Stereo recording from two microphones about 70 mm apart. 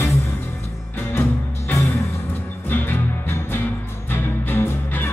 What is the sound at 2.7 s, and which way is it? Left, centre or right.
Music, left.